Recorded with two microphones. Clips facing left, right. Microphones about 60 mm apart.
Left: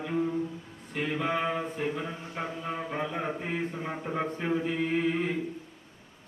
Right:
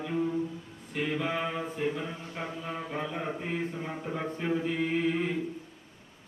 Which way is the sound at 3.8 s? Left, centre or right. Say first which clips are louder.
Left 2 dB; centre.